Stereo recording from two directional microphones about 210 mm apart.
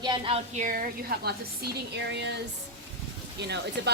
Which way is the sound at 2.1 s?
55° right (ahead or behind).